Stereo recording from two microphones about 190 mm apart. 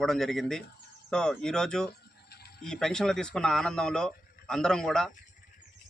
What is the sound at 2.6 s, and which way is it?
Speech, 5° left (ahead or behind).